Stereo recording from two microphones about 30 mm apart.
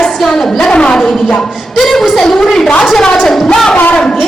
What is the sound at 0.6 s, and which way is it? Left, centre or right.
Speech, left.